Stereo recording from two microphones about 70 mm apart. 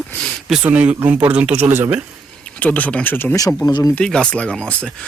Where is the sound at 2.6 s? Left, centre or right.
Left.